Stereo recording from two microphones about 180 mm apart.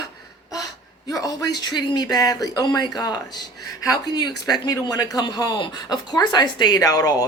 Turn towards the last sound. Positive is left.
turn(degrees=20)  # may be behind; listen again after turning